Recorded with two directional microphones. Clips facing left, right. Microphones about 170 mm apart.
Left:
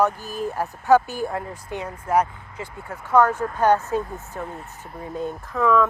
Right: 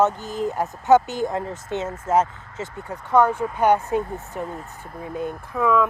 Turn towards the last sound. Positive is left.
turn(degrees=-10)  # may be behind; listen again after turning